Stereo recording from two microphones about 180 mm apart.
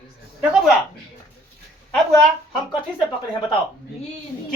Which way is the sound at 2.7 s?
25° left (ahead or behind).